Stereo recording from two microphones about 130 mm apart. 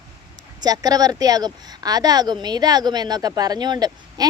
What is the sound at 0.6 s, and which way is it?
Speech, 30° right (ahead or behind).